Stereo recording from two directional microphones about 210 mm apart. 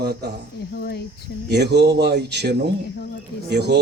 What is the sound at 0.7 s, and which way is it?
Speech, 50° left (ahead or behind).